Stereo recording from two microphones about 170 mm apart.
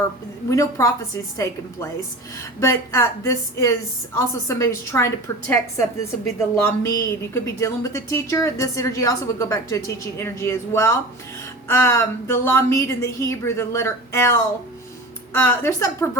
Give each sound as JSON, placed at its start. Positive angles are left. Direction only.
{"t": 0.5, "sound": "a woman's voice", "side_deg": 20}
{"t": 15.3, "sound": "a woman's voice", "side_deg": 15}